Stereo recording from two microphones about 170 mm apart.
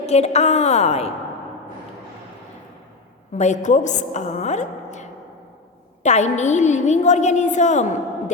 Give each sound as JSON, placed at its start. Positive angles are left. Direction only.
{"t": 0.0, "sound": "a woman's voice", "side_deg": 40}
{"t": 3.3, "sound": "a woman's voice", "side_deg": 45}